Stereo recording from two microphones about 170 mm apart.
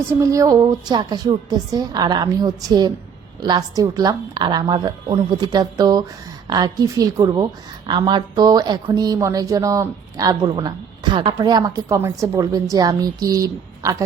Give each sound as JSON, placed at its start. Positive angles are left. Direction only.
{"t": 0.1, "sound": "speech", "side_deg": -20}